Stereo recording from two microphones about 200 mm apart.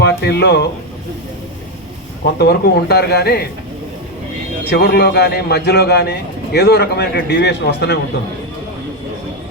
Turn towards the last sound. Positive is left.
turn(degrees=55)  # may be behind; listen again after turning